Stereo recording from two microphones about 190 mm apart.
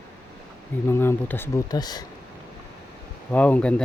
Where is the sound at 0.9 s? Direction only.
10° left (ahead or behind).